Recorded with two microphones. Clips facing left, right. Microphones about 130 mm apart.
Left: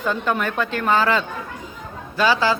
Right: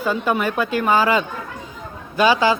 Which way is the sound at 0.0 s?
10° right (ahead or behind).